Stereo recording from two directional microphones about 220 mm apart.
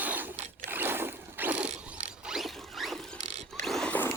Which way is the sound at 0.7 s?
10° right (ahead or behind).